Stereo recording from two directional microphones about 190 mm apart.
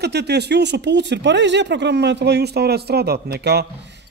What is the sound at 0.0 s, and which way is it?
Speech, 60° right (ahead or behind).